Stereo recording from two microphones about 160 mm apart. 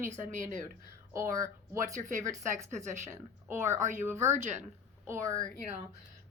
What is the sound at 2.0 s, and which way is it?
Speech, 55° right (ahead or behind).